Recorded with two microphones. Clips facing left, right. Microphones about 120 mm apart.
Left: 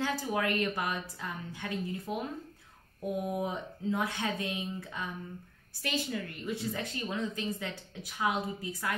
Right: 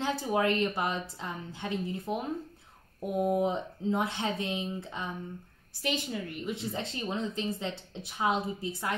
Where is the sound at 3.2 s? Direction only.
25° right (ahead or behind).